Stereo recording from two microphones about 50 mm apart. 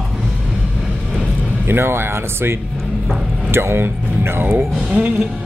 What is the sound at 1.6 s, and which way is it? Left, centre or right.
Speech, right.